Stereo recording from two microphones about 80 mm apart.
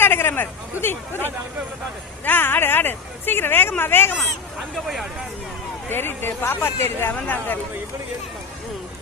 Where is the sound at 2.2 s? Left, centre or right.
Left.